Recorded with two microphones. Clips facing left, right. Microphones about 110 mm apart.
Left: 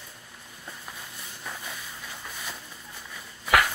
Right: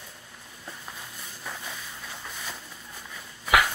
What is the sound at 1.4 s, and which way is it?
Vehicle, centre (ahead or behind).